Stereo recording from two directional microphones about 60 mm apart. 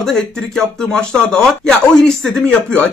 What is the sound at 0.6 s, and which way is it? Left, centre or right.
Speech, centre.